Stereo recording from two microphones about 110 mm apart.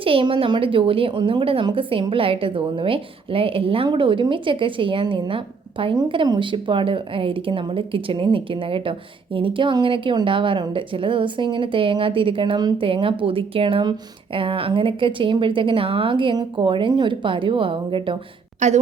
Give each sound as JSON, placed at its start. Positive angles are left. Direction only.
{"t": 0.0, "sound": "a woman's voice", "side_deg": -50}
{"t": 18.6, "sound": "a woman's voice", "side_deg": -90}